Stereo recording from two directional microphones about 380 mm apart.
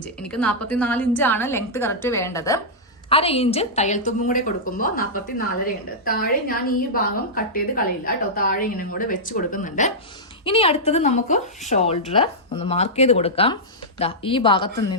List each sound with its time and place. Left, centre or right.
0.2 s a woman's voice: centre